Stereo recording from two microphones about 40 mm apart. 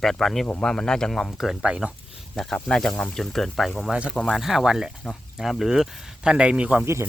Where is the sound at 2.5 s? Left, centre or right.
Centre.